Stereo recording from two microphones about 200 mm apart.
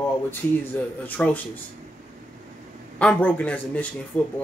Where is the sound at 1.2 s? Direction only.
5° left (ahead or behind).